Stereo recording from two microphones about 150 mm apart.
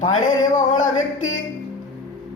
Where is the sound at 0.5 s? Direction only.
60° left (ahead or behind).